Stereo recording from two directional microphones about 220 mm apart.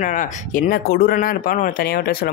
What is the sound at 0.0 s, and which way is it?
Speech, 35° left (ahead or behind).